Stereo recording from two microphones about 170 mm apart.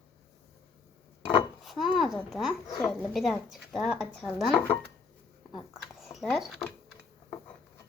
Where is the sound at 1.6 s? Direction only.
Centre (ahead or behind).